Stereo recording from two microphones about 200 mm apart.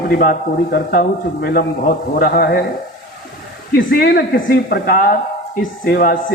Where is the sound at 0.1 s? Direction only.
45° left (ahead or behind).